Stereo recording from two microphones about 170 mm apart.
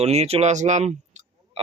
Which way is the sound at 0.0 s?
40° right (ahead or behind).